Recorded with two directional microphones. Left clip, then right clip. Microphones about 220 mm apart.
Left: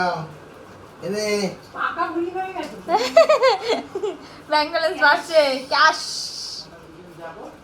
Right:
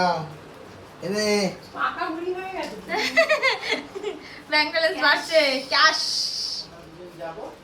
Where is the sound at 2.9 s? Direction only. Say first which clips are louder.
Left 6 dB; 5° left (ahead or behind).